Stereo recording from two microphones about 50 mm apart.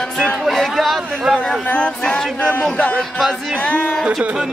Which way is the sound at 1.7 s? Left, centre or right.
Left.